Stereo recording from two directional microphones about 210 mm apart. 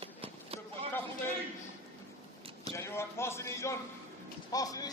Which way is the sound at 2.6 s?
15° left (ahead or behind).